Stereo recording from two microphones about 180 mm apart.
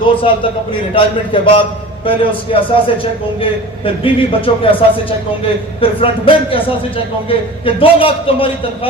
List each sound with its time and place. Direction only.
0.0 s a man's voice: 30° left (ahead or behind)